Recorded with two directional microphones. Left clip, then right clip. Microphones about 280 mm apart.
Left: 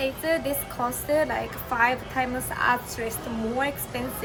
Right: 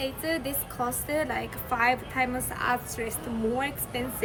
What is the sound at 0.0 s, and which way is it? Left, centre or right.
A woman's voice, centre.